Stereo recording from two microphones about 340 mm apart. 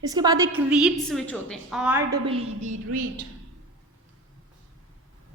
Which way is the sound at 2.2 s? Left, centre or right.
Centre.